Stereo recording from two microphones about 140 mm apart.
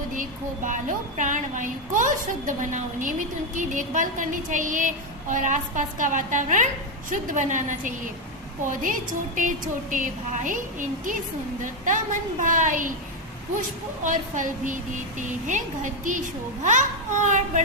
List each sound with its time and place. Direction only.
0.2 s a woman's voice: 65° right (ahead or behind)
12.4 s a woman's voice: 65° right (ahead or behind)